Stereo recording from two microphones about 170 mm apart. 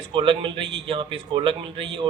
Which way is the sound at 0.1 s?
30° right (ahead or behind).